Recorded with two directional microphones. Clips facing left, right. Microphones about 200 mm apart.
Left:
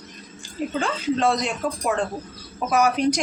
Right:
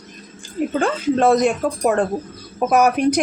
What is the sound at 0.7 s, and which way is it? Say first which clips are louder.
Speech: right 5 dB; 50° right (ahead or behind).